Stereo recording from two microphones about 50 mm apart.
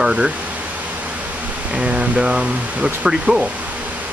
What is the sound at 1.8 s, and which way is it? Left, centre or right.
Speech, right.